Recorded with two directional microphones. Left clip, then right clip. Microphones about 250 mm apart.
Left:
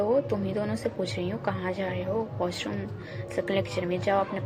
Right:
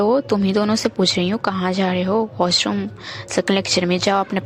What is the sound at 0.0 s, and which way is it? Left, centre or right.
A woman's voice, right.